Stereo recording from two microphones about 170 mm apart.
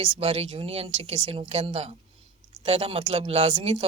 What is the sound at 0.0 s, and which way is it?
A woman's voice, 30° right (ahead or behind).